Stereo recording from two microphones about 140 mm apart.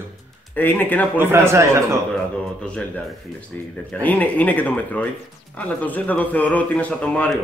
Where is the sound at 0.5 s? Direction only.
15° left (ahead or behind).